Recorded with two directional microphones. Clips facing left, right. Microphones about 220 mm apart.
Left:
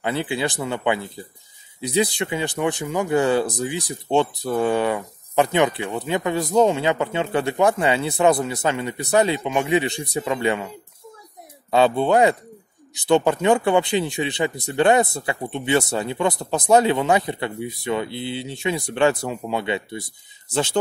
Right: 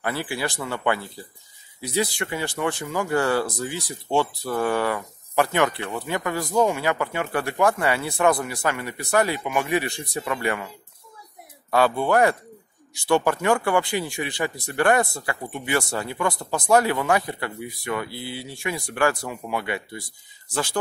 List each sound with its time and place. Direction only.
0.0 s speech: 20° left (ahead or behind)
11.7 s speech: 20° left (ahead or behind)